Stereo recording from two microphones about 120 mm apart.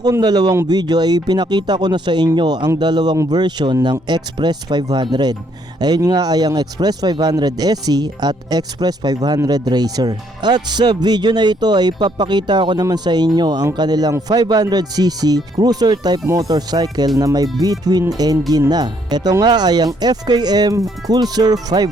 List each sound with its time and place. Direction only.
0.0 s speech: 35° right (ahead or behind)